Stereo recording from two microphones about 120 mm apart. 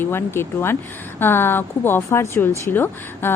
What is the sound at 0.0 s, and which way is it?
A woman's voice, 20° left (ahead or behind).